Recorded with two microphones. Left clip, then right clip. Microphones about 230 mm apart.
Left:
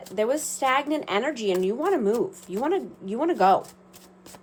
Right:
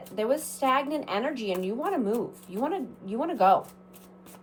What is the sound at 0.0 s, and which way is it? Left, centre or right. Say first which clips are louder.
Speech: left 3 dB; left.